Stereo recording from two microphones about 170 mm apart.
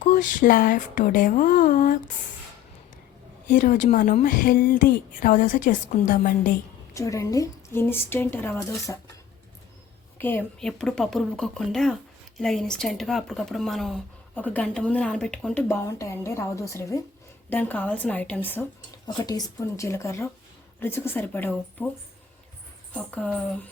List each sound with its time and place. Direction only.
0.0 s speech: 50° left (ahead or behind)
3.4 s speech: 50° left (ahead or behind)
6.9 s speech: 20° left (ahead or behind)
10.2 s a woman's voice: 10° left (ahead or behind)
19.0 s speech: 25° left (ahead or behind)
23.0 s speech: 10° left (ahead or behind)